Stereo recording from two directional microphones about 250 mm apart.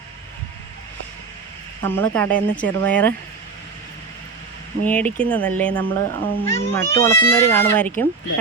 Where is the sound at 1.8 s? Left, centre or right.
Centre.